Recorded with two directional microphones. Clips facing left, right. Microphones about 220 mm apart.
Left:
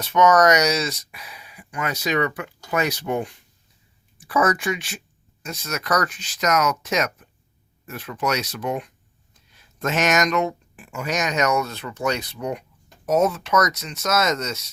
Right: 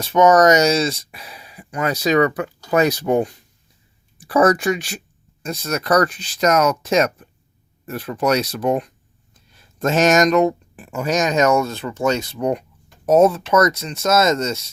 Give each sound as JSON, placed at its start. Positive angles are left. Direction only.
{"t": 0.0, "sound": "speech", "side_deg": -30}